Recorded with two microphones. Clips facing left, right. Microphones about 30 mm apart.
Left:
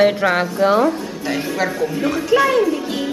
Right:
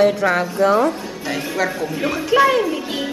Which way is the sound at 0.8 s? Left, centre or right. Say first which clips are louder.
Left 2 dB; centre.